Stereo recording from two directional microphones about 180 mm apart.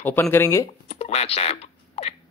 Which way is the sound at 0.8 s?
40° left (ahead or behind).